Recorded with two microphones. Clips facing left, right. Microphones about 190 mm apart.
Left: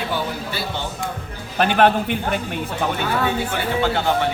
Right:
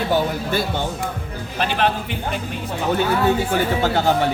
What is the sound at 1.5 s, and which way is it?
Speech, 55° left (ahead or behind).